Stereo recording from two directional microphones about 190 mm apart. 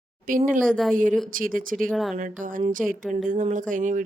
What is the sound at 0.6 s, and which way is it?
Speech, 5° left (ahead or behind).